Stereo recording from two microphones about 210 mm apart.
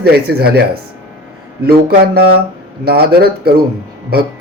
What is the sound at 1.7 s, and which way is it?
Speech, 50° right (ahead or behind).